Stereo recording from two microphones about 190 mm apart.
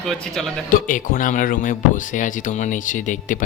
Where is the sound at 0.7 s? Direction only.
40° left (ahead or behind).